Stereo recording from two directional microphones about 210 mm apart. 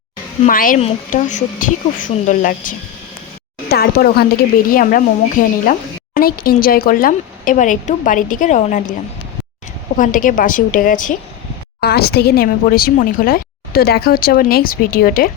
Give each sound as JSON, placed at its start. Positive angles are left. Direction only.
{"t": 0.4, "sound": "a woman's voice", "side_deg": 40}
{"t": 10.0, "sound": "a woman's voice", "side_deg": 40}